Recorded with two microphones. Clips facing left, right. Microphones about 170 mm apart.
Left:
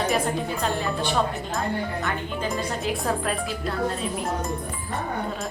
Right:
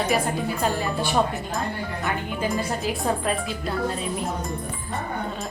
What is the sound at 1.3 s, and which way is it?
A woman's voice, centre (ahead or behind).